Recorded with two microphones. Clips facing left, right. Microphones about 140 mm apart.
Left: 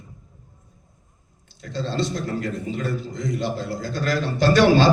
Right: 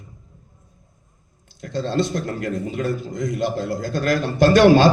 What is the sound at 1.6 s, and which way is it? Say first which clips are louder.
A man's voice: right 4 dB; 50° right (ahead or behind).